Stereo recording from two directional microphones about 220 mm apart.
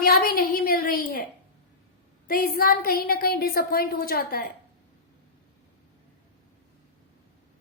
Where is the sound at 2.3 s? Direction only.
40° left (ahead or behind).